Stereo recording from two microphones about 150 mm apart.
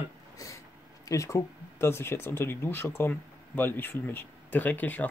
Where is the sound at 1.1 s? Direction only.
20° left (ahead or behind).